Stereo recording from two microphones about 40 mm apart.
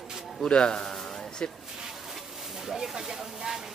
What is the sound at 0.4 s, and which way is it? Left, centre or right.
Speech, centre.